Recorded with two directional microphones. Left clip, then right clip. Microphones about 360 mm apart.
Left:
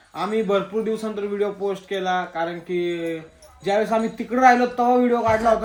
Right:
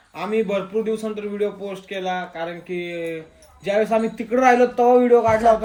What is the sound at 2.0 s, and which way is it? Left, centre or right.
Speech, centre.